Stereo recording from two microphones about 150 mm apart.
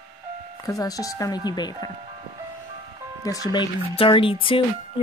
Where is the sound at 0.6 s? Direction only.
25° left (ahead or behind).